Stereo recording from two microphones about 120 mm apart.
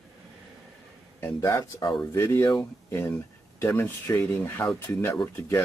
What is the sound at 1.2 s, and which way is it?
Speech, 25° left (ahead or behind).